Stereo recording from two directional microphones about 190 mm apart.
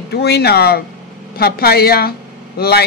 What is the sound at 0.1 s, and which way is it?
Speech, 55° left (ahead or behind).